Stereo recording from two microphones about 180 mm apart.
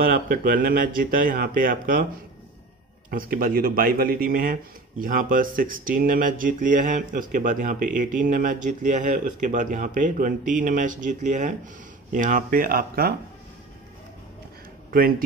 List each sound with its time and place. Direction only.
0.0 s speech: 55° right (ahead or behind)
3.1 s speech: 50° right (ahead or behind)
14.9 s speech: 50° right (ahead or behind)